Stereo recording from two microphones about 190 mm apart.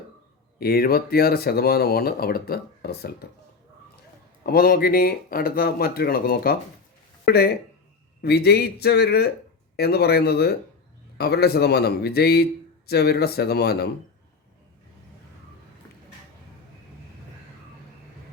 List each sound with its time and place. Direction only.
0.6 s speech: 55° left (ahead or behind)
4.4 s a man's voice: 50° left (ahead or behind)